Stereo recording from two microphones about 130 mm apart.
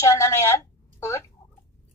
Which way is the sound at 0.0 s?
20° left (ahead or behind).